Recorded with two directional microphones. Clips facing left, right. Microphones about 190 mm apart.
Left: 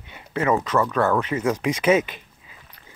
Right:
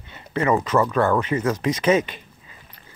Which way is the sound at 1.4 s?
15° left (ahead or behind).